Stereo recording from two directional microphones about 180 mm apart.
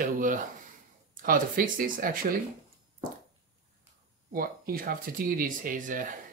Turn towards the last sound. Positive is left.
turn(degrees=-45)  # may be behind; listen again after turning